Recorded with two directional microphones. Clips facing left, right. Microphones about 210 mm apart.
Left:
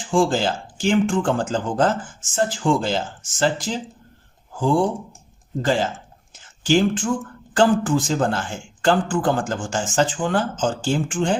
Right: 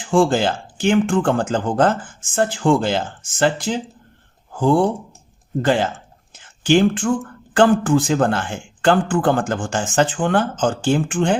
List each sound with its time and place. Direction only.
0.0 s speech: 60° right (ahead or behind)